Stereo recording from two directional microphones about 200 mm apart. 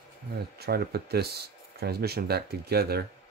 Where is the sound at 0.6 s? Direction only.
50° right (ahead or behind).